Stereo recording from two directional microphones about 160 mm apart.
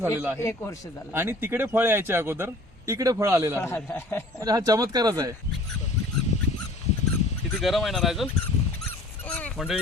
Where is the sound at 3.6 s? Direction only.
15° left (ahead or behind).